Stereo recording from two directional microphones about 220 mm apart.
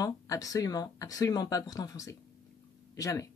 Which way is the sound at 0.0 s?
15° left (ahead or behind).